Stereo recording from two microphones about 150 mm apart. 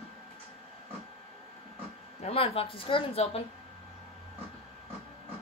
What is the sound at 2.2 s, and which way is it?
A woman's voice, 40° left (ahead or behind).